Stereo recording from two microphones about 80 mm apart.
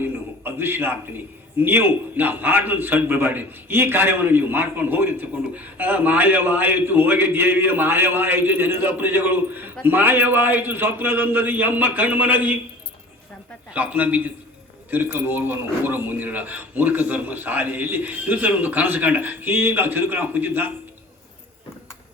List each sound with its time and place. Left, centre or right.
0.0 s a man's voice: right
13.7 s a man's voice: centre